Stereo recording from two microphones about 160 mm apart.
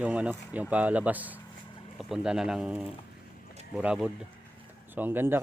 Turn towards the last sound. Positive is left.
turn(degrees=-15)  # may be behind; listen again after turning